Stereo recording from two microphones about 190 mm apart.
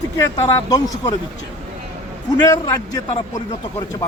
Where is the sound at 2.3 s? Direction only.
20° left (ahead or behind).